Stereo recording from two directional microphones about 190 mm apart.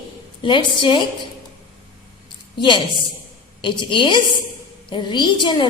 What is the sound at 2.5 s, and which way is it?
A woman's voice, 25° left (ahead or behind).